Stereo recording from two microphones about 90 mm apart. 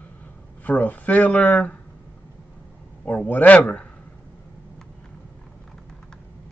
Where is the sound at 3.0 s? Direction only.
15° left (ahead or behind).